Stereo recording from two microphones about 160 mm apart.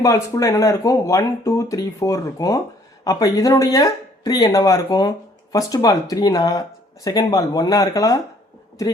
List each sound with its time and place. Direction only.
0.0 s speech: 20° left (ahead or behind)